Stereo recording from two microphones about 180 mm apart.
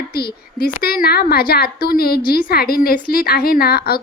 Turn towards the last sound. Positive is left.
turn(degrees=60)  # may be behind; listen again after turning